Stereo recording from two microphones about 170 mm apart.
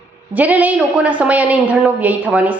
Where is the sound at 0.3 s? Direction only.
10° right (ahead or behind).